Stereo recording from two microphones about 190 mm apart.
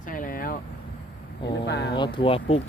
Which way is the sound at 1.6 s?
65° left (ahead or behind).